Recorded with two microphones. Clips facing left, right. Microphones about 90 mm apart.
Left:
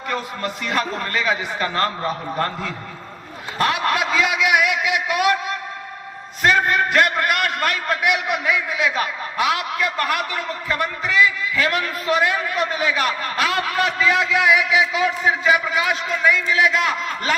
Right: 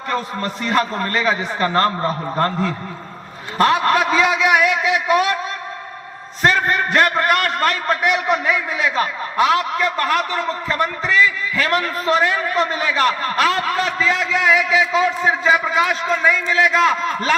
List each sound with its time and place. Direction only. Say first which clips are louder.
0.1 s a man's voice: right 3 dB; 35° right (ahead or behind)
3.6 s a sound: right 5 dB; 35° right (ahead or behind)
6.4 s a man's voice: even; 35° right (ahead or behind)